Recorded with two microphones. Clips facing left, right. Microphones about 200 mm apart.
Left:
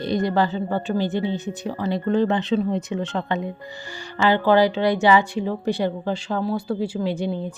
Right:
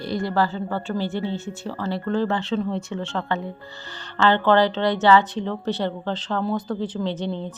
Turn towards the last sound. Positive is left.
turn(degrees=10)  # may be behind; listen again after turning